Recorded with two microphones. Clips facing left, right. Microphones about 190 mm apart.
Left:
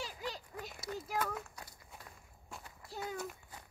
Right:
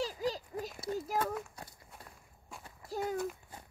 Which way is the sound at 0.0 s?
40° right (ahead or behind).